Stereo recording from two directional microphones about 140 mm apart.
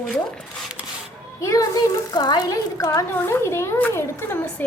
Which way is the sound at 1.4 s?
20° left (ahead or behind).